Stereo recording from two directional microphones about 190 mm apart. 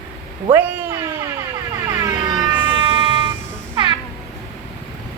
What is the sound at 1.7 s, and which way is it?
Air horn, 20° right (ahead or behind).